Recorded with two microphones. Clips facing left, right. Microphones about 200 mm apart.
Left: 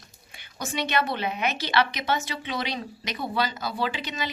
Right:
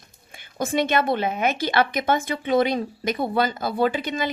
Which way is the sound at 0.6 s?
50° right (ahead or behind).